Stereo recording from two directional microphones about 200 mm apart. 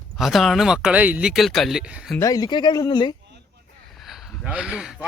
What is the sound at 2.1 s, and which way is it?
Speech, 15° left (ahead or behind).